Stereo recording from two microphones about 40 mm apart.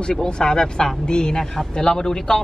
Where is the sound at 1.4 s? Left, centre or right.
Centre.